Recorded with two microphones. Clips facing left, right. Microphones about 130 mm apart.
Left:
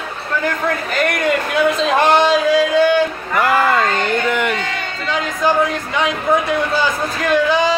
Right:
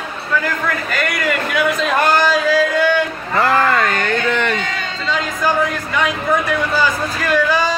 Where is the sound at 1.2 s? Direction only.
25° left (ahead or behind).